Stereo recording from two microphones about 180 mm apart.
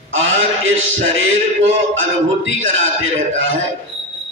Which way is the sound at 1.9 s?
90° right.